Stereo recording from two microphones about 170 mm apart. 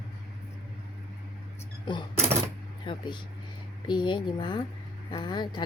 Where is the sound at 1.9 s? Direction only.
30° left (ahead or behind).